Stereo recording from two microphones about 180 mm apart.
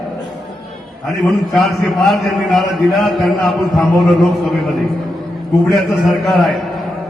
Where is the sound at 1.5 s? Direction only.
Centre (ahead or behind).